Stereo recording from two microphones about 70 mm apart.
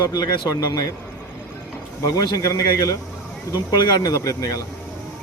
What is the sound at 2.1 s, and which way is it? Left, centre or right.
Speech, left.